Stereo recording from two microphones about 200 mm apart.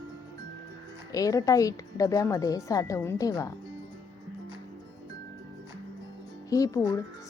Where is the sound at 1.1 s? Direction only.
15° left (ahead or behind).